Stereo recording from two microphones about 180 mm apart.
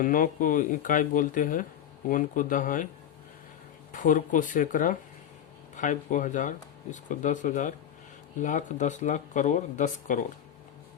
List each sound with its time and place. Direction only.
0.0 s speech: 50° left (ahead or behind)
3.9 s speech: 45° left (ahead or behind)